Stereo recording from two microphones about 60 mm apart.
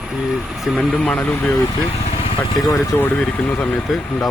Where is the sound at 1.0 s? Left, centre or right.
Centre.